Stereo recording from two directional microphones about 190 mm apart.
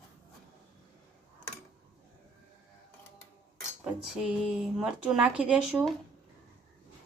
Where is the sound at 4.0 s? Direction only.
5° right (ahead or behind).